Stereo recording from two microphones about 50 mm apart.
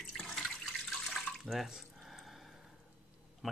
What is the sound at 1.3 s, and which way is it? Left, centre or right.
Drip, centre.